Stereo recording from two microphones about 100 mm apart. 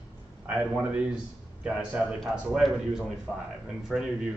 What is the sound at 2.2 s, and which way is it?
Speech, centre (ahead or behind).